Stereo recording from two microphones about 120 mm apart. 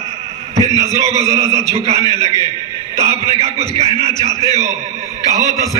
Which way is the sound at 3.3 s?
55° right (ahead or behind).